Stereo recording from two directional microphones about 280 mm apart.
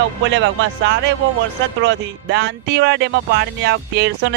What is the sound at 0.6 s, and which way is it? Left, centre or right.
Speech, right.